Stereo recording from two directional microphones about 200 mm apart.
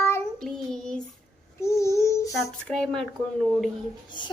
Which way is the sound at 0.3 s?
Centre (ahead or behind).